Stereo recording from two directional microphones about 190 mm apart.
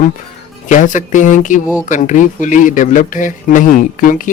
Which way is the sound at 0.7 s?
40° left (ahead or behind).